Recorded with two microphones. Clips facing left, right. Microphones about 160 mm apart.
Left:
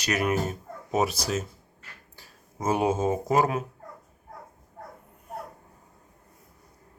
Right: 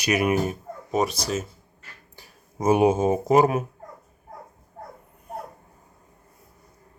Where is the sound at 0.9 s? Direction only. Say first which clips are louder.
Right 1 dB; 5° left (ahead or behind).